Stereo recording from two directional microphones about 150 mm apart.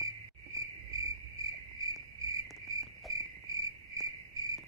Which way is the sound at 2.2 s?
20° right (ahead or behind).